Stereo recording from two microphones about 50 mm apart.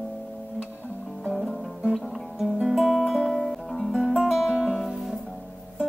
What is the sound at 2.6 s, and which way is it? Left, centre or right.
Guitar, centre.